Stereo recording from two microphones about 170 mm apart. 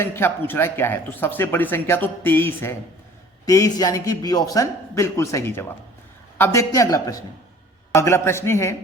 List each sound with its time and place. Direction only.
0.0 s a man's voice: 15° left (ahead or behind)